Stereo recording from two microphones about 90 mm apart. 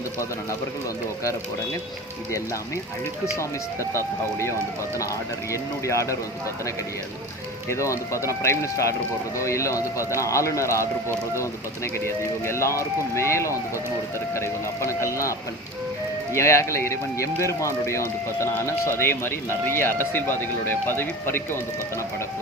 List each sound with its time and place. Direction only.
3.3 s speech: 30° left (ahead or behind)
7.7 s speech: 35° left (ahead or behind)
12.0 s speech: 30° left (ahead or behind)